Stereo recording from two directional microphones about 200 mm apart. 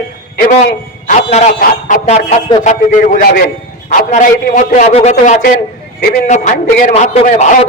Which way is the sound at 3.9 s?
35° left (ahead or behind).